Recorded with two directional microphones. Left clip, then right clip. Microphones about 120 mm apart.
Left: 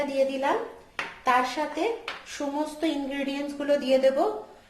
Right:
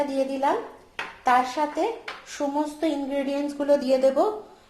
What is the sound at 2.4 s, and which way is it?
Speech, 25° right (ahead or behind).